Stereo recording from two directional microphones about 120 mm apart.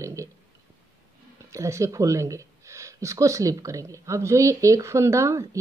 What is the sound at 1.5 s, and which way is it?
Speech, 25° right (ahead or behind).